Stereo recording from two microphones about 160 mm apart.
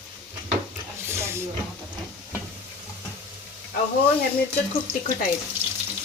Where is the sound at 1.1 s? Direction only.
15° right (ahead or behind).